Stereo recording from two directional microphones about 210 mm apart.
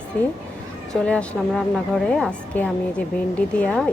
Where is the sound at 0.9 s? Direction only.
5° left (ahead or behind).